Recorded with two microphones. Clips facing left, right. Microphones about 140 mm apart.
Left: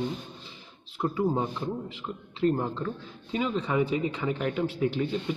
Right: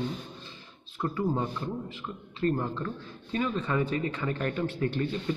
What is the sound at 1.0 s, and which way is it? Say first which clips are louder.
A man's voice: left 2 dB; 15° left (ahead or behind).